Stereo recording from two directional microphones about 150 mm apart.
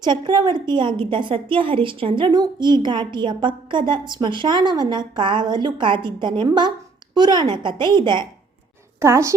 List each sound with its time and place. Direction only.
0.0 s a woman's voice: 30° right (ahead or behind)
9.0 s a woman's voice: 20° right (ahead or behind)